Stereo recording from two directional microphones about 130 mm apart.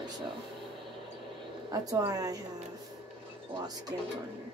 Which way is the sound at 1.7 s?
30° right (ahead or behind).